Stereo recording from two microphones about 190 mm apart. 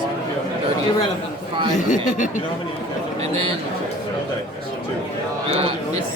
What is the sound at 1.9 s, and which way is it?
Speech, 40° left (ahead or behind).